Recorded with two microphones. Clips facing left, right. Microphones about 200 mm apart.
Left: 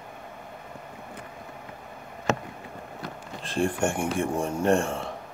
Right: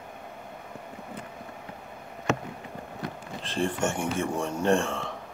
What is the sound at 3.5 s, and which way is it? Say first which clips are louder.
Mantra: left 2 dB; 10° left (ahead or behind).